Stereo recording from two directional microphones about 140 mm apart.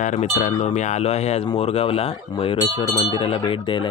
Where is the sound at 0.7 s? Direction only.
55° left (ahead or behind).